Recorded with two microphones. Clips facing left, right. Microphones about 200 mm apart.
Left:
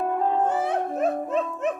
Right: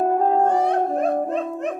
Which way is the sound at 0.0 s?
40° right (ahead or behind).